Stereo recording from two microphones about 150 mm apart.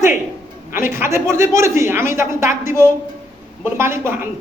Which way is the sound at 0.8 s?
15° right (ahead or behind).